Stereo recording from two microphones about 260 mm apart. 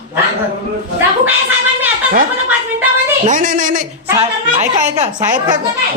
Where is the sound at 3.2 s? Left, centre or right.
Right.